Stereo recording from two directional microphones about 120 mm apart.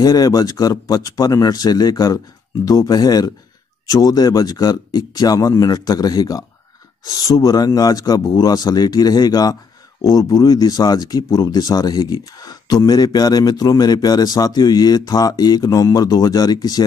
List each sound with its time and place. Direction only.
0.0 s speech: 30° left (ahead or behind)